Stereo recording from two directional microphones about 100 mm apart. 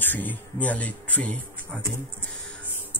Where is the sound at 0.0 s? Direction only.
20° left (ahead or behind).